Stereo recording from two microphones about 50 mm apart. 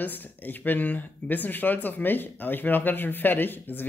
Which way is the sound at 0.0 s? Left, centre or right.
Left.